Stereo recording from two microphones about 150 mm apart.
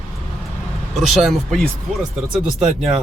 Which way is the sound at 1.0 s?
Centre (ahead or behind).